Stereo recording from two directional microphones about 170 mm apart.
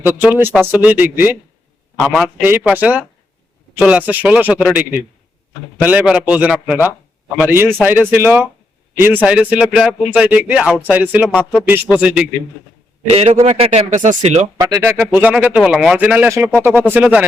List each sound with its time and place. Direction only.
0.0 s speech: 10° right (ahead or behind)
13.1 s speech: 40° right (ahead or behind)
14.6 s speech: 20° right (ahead or behind)